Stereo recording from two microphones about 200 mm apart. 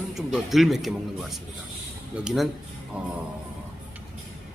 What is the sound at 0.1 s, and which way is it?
Speech, centre (ahead or behind).